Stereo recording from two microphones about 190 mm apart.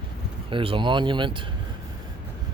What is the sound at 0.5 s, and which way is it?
Speech, 25° right (ahead or behind).